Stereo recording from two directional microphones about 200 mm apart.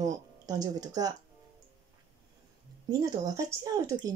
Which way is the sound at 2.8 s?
20° right (ahead or behind).